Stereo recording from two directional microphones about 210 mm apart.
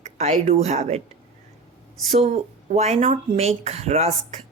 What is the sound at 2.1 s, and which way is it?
Speech, 30° right (ahead or behind).